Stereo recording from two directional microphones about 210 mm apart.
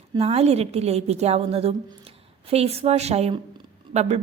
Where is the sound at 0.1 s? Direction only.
30° right (ahead or behind).